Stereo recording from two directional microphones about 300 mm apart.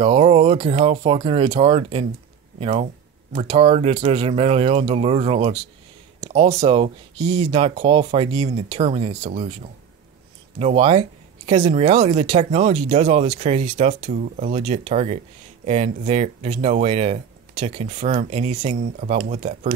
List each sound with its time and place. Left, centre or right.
0.0 s speech: centre